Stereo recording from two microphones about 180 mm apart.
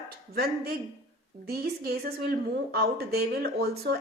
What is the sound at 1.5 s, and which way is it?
Speech, 60° right (ahead or behind).